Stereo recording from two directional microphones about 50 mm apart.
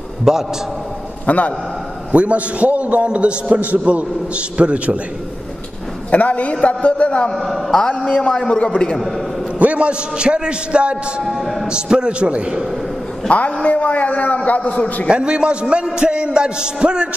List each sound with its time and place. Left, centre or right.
0.2 s a man's voice: centre
1.2 s a man's voice: left
2.1 s a man's voice: right
6.0 s a man's voice: left
7.3 s speech: centre
8.0 s a man's voice: left
9.6 s a man's voice: right
11.2 s speech: centre
11.6 s a man's voice: centre
13.3 s a man's voice: left
15.0 s a man's voice: centre